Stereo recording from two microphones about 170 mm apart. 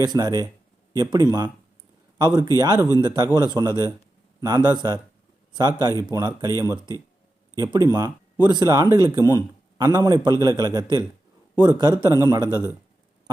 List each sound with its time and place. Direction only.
0.0 s a man's voice: 25° right (ahead or behind)
7.5 s speech: 20° right (ahead or behind)